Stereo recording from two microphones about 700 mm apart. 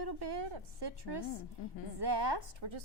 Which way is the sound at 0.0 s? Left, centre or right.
Right.